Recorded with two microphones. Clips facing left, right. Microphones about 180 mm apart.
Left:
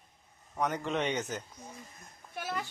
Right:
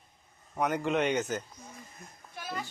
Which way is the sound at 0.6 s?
5° right (ahead or behind).